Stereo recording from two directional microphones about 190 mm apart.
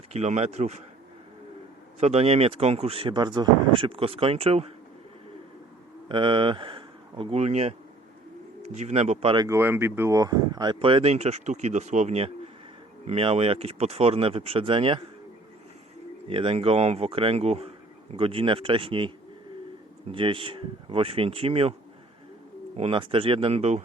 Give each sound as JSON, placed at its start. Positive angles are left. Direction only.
{"t": 0.1, "sound": "speech", "side_deg": -35}
{"t": 2.0, "sound": "speech", "side_deg": -35}
{"t": 6.1, "sound": "speech", "side_deg": -25}
{"t": 16.3, "sound": "speech", "side_deg": -30}
{"t": 22.8, "sound": "speech", "side_deg": -30}